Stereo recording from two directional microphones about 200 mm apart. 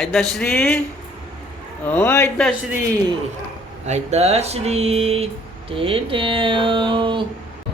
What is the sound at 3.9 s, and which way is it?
Speech, 35° right (ahead or behind).